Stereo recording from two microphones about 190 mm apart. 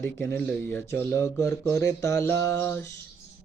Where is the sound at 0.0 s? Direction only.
15° left (ahead or behind).